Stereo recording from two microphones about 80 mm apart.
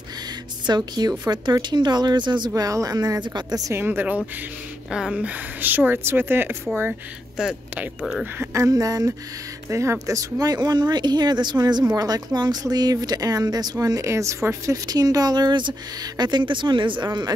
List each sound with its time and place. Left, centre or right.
0.7 s a woman's voice: right
3.7 s a woman's voice: right
4.9 s a woman's voice: centre; by 6.5 s right
8.5 s speech: right
14.9 s a woman's voice: right